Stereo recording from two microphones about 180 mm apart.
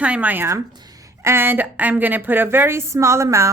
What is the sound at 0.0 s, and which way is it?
A woman's voice, 5° right (ahead or behind).